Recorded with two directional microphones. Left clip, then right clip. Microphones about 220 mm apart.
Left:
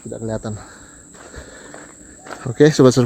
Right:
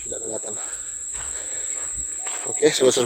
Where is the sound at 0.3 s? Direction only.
Centre (ahead or behind).